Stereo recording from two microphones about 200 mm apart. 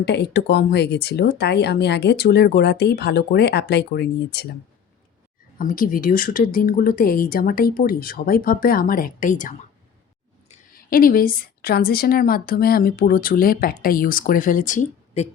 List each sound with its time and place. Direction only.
0.0 s speech: 55° left (ahead or behind)
5.5 s a woman's voice: 45° left (ahead or behind)
10.8 s a woman's voice: 45° left (ahead or behind)